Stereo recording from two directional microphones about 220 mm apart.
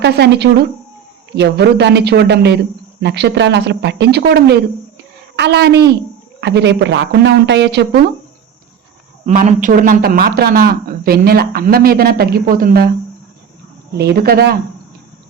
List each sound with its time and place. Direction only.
0.0 s speech: 50° right (ahead or behind)
9.2 s speech: 35° right (ahead or behind)
13.9 s speech: 45° right (ahead or behind)